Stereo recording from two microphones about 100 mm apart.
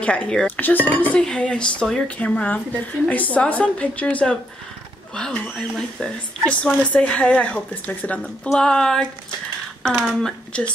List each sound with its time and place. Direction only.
0.0 s a woman's voice: 10° left (ahead or behind)
10.2 s a woman's voice: 10° left (ahead or behind)